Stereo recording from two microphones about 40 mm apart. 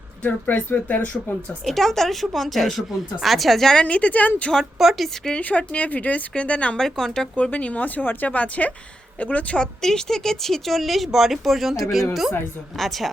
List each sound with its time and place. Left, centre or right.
0.3 s speech: left
1.6 s speech: centre
3.8 s speech: left
4.8 s speech: centre
5.4 s speech: left
6.7 s speech: centre
7.5 s speech: left
9.6 s speech: centre